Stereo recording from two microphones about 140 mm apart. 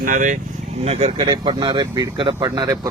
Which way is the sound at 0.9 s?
50° right (ahead or behind).